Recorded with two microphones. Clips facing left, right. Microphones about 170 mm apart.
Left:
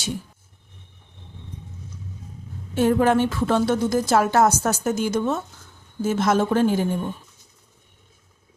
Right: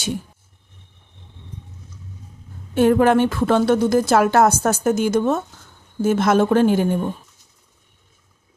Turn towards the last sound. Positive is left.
turn(degrees=-65)  # may be behind; listen again after turning